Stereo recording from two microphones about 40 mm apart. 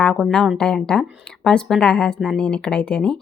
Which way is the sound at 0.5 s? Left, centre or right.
Centre.